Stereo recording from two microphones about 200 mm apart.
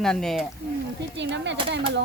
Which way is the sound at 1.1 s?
65° right (ahead or behind).